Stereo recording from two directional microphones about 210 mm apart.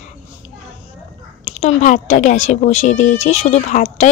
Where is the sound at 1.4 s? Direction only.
30° left (ahead or behind).